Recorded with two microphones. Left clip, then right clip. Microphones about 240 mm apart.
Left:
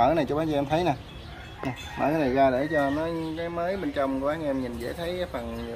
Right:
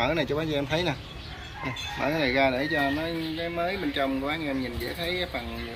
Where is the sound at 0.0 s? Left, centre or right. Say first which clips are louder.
Left 4 dB; left.